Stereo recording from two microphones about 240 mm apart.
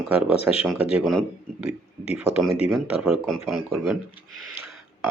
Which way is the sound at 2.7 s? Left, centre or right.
Centre.